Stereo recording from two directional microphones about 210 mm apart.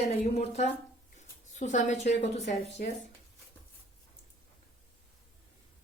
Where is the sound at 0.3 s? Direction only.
30° left (ahead or behind).